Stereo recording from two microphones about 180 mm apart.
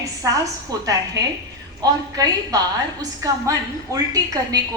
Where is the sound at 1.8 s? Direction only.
20° right (ahead or behind).